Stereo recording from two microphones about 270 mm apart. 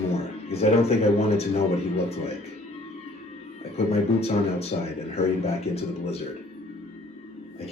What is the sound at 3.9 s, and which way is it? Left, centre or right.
Speech, left.